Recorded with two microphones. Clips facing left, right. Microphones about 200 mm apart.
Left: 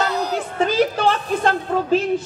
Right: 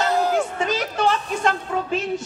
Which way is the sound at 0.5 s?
35° left (ahead or behind).